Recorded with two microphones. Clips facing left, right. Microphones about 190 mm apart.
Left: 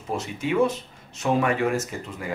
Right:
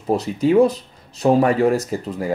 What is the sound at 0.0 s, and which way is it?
Speech, 35° right (ahead or behind).